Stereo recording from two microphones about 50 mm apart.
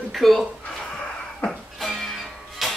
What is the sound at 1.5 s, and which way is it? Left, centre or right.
Music, centre.